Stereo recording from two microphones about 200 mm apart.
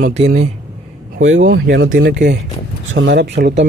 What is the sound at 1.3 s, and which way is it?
Speech, 70° right (ahead or behind).